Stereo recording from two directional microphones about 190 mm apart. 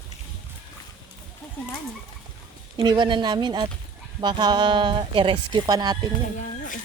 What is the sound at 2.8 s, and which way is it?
A woman's voice, 25° right (ahead or behind).